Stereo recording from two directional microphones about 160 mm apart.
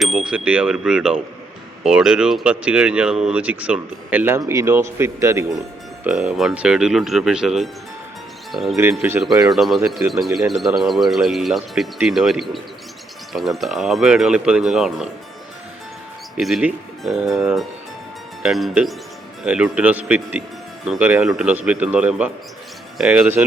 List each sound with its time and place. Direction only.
0.0 s speech: 5° right (ahead or behind)
6.1 s speech: 5° right (ahead or behind)
8.8 s speech: 10° right (ahead or behind)
9.2 s speech: centre (ahead or behind)
16.4 s speech: 5° right (ahead or behind)